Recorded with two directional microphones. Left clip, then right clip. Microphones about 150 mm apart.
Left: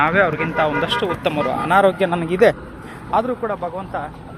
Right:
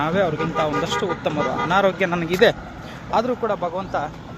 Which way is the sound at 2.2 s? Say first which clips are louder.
Left 1 dB; 10° left (ahead or behind).